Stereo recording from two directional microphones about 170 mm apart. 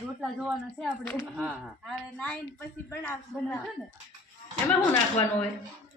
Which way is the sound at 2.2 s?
10° left (ahead or behind).